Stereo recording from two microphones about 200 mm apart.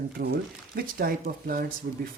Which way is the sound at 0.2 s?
45° right (ahead or behind).